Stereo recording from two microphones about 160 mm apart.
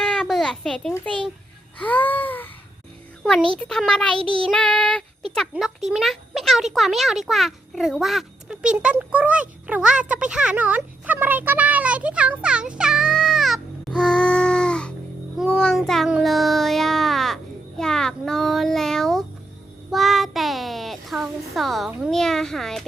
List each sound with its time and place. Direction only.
0.0 s a sound: 5° left (ahead or behind)
3.6 s a child's voice: 5° left (ahead or behind)
4.2 s child singing: 35° right (ahead or behind)
4.5 s child singing: 5° left (ahead or behind)
5.3 s a child's voice: centre (ahead or behind)